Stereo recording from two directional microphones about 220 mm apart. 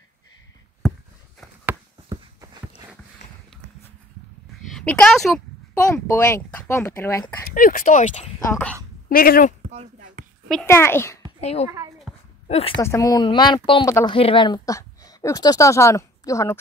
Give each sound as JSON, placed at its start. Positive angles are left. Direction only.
{"t": 1.7, "sound": "a sound", "side_deg": -15}
{"t": 4.6, "sound": "a woman's voice", "side_deg": 5}
{"t": 6.0, "sound": "speech", "side_deg": 10}
{"t": 7.5, "sound": "speech", "side_deg": 40}
{"t": 8.5, "sound": "speech", "side_deg": 10}
{"t": 9.1, "sound": "speech", "side_deg": 40}
{"t": 9.7, "sound": "a sound", "side_deg": -35}
{"t": 10.5, "sound": "speech", "side_deg": 10}
{"t": 11.4, "sound": "a child's voice", "side_deg": 30}
{"t": 12.1, "sound": "a sound", "side_deg": 0}
{"t": 12.4, "sound": "a woman's voice", "side_deg": 30}
{"t": 12.8, "sound": "a child's voice", "side_deg": 15}